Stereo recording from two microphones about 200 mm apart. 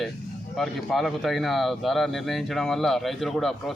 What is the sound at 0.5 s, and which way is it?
Speech, centre (ahead or behind).